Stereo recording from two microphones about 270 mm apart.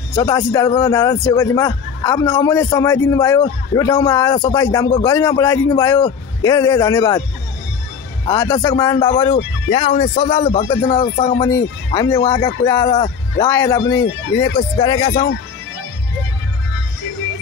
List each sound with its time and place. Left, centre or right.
0.1 s speech: centre
8.3 s speech: centre
13.9 s speech: left